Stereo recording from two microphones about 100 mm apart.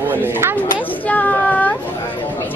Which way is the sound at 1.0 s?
15° left (ahead or behind).